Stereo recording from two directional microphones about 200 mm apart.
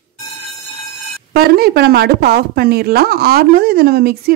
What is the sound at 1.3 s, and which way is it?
A woman's voice, 50° right (ahead or behind).